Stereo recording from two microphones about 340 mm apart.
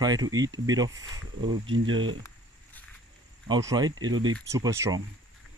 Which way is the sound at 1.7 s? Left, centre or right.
Right.